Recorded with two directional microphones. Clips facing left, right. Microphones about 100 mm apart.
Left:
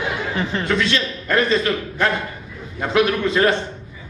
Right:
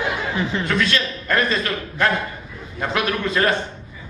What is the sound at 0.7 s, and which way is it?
Speech, 25° left (ahead or behind).